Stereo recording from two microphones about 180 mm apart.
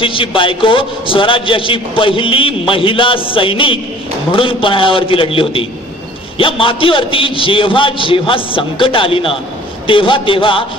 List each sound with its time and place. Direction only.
0.0 s a man's voice: 30° left (ahead or behind)